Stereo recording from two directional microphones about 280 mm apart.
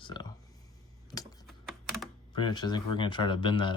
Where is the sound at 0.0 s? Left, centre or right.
Centre.